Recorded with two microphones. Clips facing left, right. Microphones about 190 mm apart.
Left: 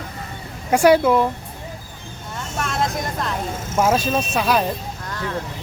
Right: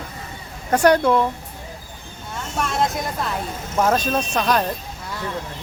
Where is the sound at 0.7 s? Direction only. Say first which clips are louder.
Left 2 dB; 10° left (ahead or behind).